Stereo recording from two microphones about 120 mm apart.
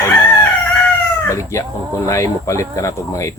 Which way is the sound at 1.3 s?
25° left (ahead or behind).